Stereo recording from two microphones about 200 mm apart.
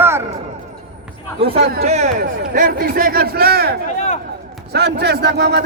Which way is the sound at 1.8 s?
35° right (ahead or behind).